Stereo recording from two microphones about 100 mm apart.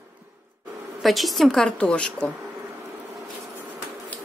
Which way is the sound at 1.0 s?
Centre (ahead or behind).